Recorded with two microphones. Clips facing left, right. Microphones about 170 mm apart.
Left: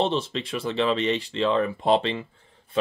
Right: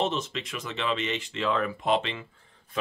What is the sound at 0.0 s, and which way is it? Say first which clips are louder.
Speech: left 4 dB; 30° left (ahead or behind).